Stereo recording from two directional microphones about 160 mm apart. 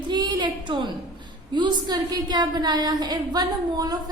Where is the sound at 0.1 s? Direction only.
25° right (ahead or behind).